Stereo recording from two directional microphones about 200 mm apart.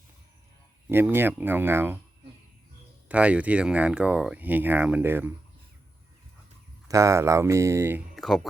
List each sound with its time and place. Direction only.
0.9 s speech: 10° right (ahead or behind)
3.1 s speech: 5° right (ahead or behind)
6.8 s speech: 15° right (ahead or behind)